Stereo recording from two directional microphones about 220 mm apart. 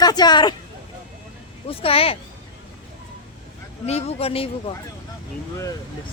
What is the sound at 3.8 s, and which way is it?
Speech, 30° left (ahead or behind).